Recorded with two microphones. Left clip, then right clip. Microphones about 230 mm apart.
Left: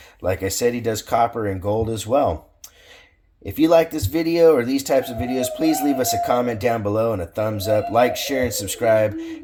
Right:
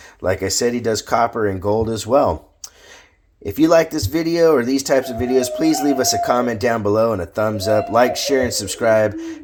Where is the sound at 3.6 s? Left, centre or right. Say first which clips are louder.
Right 2 dB; right.